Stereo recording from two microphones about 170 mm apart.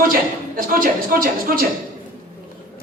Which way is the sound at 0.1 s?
55° right (ahead or behind).